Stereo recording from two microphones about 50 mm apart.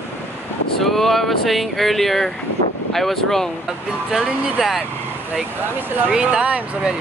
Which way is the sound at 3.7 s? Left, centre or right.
Centre.